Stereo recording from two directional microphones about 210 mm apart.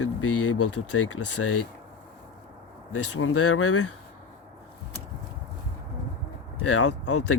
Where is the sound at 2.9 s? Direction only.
80° left.